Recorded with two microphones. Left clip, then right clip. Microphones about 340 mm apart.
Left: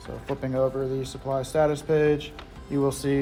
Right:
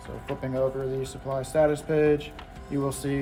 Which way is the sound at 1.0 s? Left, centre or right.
Left.